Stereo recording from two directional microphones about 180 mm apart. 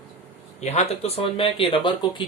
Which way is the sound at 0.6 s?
35° left (ahead or behind).